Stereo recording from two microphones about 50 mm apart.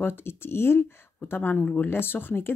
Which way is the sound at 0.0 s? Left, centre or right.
Left.